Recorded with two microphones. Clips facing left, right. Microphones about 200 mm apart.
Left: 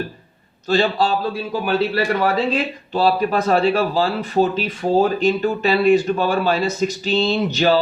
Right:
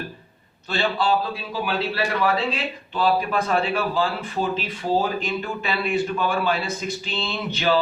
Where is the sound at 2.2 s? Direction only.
45° left (ahead or behind).